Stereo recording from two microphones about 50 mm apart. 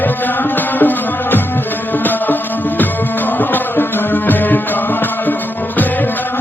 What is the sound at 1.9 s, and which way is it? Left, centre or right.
Music, left.